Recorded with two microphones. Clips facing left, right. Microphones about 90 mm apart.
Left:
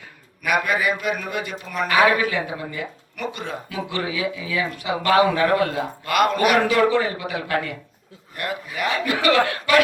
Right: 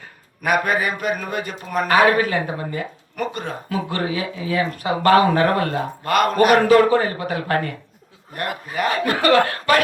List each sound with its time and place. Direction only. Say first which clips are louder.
0.0 s speech: right 4 dB; 40° right (ahead or behind)